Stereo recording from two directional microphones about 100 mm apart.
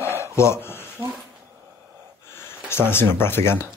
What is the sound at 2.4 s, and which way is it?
Speech, 25° left (ahead or behind).